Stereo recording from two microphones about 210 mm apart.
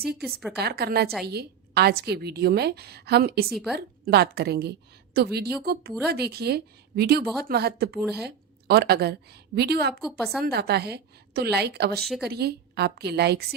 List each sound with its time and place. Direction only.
0.2 s a woman's voice: centre (ahead or behind)
0.6 s a woman's voice: 50° right (ahead or behind)
3.5 s a woman's voice: centre (ahead or behind)
4.0 s a woman's voice: 50° right (ahead or behind)
10.0 s a woman's voice: centre (ahead or behind)
10.4 s a woman's voice: 50° right (ahead or behind)
11.9 s a woman's voice: centre (ahead or behind)
12.3 s a woman's voice: 50° right (ahead or behind)